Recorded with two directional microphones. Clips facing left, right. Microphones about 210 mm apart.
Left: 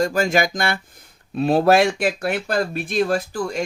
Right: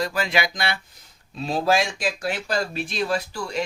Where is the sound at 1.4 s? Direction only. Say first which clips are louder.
Left 7 dB; 60° left (ahead or behind).